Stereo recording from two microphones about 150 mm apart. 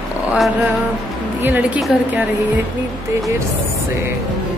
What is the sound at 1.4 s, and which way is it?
Speech, 10° right (ahead or behind).